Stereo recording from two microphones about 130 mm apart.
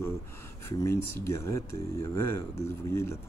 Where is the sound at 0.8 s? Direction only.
20° left (ahead or behind).